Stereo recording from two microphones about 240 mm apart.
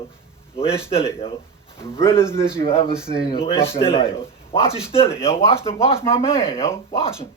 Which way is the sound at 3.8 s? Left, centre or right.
Left.